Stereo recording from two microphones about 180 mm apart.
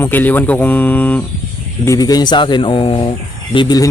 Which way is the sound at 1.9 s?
20° left (ahead or behind).